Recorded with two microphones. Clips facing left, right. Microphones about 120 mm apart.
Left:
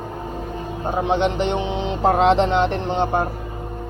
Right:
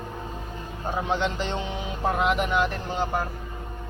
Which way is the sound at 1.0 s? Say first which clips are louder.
Left 7 dB; 20° left (ahead or behind).